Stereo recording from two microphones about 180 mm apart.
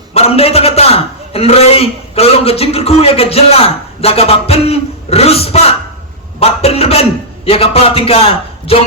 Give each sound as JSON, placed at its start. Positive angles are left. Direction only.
{"t": 0.1, "sound": "a man's voice", "side_deg": 35}